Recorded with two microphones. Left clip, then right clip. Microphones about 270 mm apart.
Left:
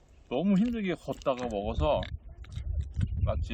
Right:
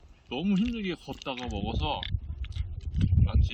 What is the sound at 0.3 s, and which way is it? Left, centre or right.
Speech, centre.